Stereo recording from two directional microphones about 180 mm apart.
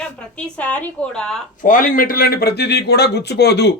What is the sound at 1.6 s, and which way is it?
Speech, 45° left (ahead or behind).